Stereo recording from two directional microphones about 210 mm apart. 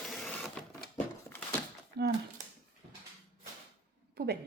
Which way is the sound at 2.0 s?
50° right (ahead or behind).